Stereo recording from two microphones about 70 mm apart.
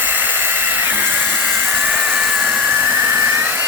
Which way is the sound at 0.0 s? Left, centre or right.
Right.